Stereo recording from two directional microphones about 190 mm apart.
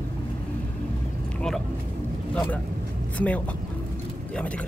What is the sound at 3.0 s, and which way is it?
Speech, 5° left (ahead or behind).